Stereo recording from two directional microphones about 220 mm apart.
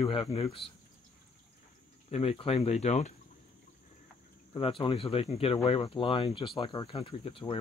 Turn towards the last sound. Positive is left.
turn(degrees=25)  # may be behind; listen again after turning